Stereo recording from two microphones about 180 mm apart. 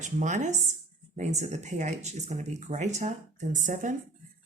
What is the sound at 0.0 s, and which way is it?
Speech, 45° right (ahead or behind).